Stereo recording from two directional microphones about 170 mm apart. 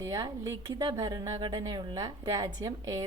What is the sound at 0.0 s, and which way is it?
A woman's voice, 20° right (ahead or behind).